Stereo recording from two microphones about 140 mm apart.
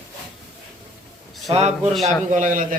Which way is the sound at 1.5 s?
50° right (ahead or behind).